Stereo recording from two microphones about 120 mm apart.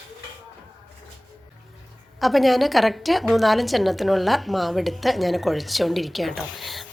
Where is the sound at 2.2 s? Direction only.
Centre (ahead or behind).